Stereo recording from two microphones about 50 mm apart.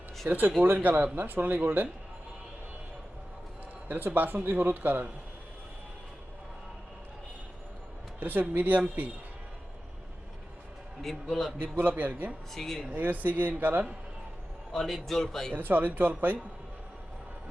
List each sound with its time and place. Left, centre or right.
0.3 s speech: right
3.8 s speech: right
8.2 s speech: right
11.0 s a man's voice: centre
11.6 s speech: right
12.5 s speech: centre
12.9 s speech: right
14.7 s a man's voice: centre
15.5 s speech: right